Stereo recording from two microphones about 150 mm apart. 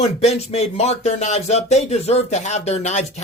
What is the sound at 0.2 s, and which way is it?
Speech, 45° left (ahead or behind).